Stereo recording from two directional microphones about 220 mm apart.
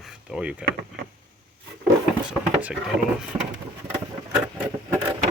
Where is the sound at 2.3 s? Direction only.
5° right (ahead or behind).